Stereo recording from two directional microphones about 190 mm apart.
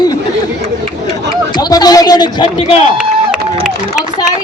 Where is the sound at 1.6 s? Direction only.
20° left (ahead or behind).